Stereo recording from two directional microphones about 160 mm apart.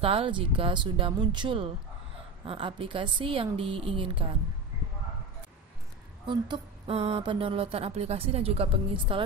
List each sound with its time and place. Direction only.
0.0 s speech: 35° right (ahead or behind)
6.2 s speech: 30° right (ahead or behind)